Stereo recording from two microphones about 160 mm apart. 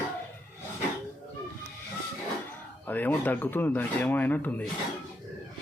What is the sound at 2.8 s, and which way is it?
Speech, 10° left (ahead or behind).